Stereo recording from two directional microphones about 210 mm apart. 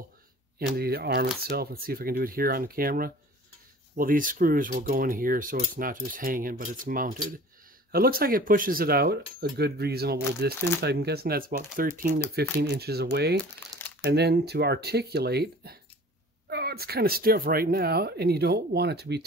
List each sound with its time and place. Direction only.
0.6 s speech: 50° right (ahead or behind)